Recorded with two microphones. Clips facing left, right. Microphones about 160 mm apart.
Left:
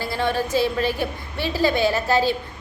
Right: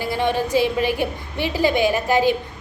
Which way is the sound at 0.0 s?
15° right (ahead or behind).